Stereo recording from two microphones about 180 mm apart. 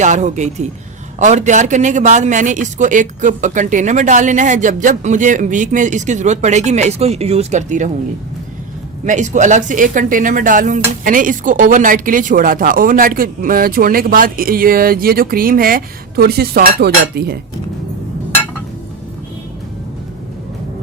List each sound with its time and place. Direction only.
0.0 s a man's voice: 40° right (ahead or behind)
9.0 s a man's voice: 40° right (ahead or behind); by 17.3 s 60° right (ahead or behind)